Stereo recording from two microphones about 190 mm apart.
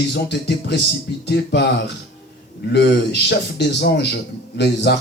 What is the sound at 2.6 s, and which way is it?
Speech, 60° left (ahead or behind).